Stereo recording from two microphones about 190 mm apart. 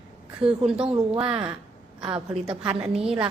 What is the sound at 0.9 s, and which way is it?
A woman's voice, 30° right (ahead or behind).